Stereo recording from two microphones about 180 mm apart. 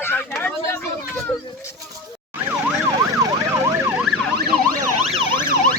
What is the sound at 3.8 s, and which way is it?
Emergency vehicle, 10° right (ahead or behind).